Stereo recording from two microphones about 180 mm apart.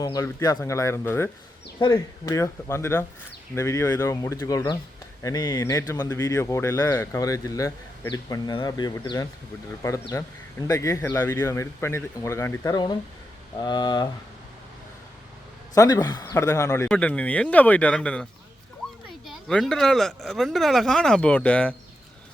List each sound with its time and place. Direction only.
0.0 s speech: 20° left (ahead or behind)
10.7 s speech: 20° left (ahead or behind)
15.7 s speech: 20° left (ahead or behind)
19.3 s speech: 5° left (ahead or behind)